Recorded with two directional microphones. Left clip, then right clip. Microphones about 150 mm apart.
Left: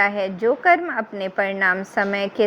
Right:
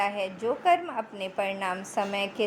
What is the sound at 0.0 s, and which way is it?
A woman's voice, 55° left (ahead or behind).